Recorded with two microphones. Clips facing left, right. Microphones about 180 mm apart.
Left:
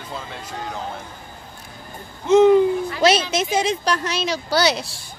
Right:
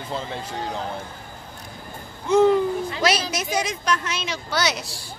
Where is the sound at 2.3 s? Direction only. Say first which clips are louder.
Left 4 dB; 20° left (ahead or behind).